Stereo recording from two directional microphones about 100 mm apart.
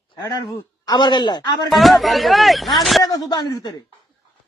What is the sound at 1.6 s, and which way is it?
Speech, centre (ahead or behind).